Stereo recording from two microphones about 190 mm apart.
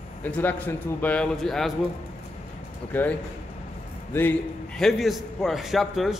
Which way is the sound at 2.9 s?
10° left (ahead or behind).